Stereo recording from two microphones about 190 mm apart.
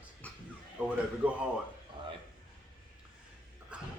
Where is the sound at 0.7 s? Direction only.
5° right (ahead or behind).